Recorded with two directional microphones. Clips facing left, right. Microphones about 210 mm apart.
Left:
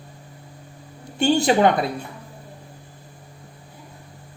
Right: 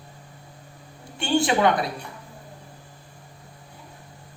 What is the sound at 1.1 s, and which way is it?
Speech, 40° left (ahead or behind).